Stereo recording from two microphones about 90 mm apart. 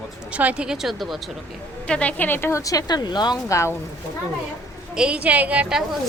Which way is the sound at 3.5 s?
35° left (ahead or behind).